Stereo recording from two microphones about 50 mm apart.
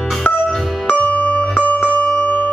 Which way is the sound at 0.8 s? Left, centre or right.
Left.